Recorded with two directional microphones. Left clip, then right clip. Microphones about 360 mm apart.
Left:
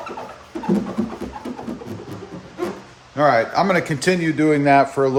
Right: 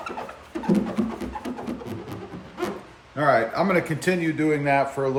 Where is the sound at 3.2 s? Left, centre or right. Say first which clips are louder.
Left 4 dB; centre.